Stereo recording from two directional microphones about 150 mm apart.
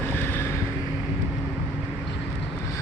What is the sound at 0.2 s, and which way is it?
Vehicle, 15° left (ahead or behind).